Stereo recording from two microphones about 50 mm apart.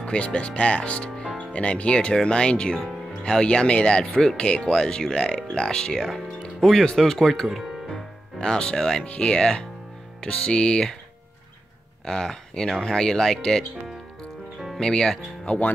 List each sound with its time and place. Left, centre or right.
0.0 s speech: left
1.1 s music: centre
1.5 s speech: left
4.0 s speech: centre
4.5 s speech: left
7.4 s speech: centre
7.9 s music: centre
9.0 s speech: left
12.0 s speech: centre
14.8 s speech: centre
15.4 s speech: left